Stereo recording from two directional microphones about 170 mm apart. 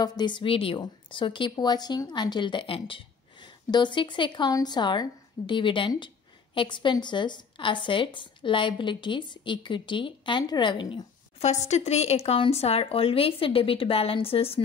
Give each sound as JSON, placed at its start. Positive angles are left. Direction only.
{"t": 0.0, "sound": "a woman's voice", "side_deg": 25}